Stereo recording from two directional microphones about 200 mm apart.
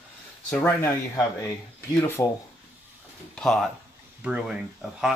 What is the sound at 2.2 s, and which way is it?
Speech, 15° left (ahead or behind).